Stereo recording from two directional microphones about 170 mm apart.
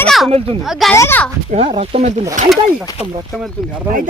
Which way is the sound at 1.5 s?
35° right (ahead or behind).